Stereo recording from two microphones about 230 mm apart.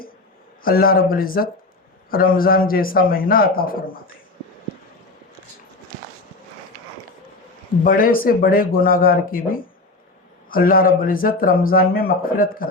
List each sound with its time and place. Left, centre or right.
0.6 s a man's voice: left
7.9 s a man's voice: left